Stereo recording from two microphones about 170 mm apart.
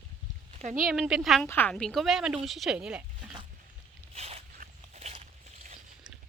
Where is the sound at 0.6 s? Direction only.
50° right (ahead or behind).